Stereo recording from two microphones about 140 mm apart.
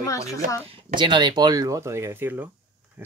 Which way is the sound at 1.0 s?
35° right (ahead or behind).